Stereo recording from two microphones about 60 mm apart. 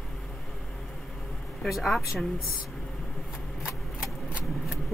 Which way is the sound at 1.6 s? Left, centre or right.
Centre.